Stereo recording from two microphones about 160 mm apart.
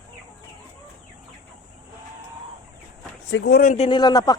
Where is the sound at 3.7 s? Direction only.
40° left (ahead or behind).